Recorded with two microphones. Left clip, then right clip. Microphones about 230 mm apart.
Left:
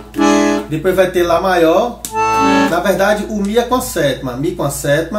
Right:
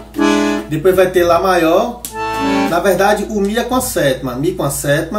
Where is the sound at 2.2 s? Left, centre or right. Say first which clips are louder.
Left 5 dB; centre.